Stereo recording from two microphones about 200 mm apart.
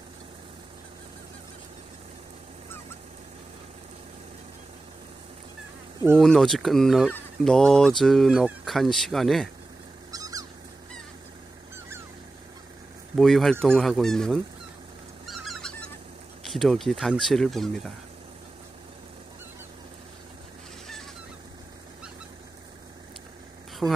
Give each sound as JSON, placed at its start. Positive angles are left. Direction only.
{"t": 6.1, "sound": "speech", "side_deg": 0}
{"t": 10.1, "sound": "bird", "side_deg": -20}
{"t": 13.1, "sound": "speech", "side_deg": 0}
{"t": 15.2, "sound": "a sound", "side_deg": 0}
{"t": 16.4, "sound": "speech", "side_deg": 0}
{"t": 23.8, "sound": "a woman's voice", "side_deg": -5}